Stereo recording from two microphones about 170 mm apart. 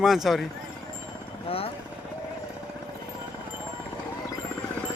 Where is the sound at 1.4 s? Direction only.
35° left (ahead or behind).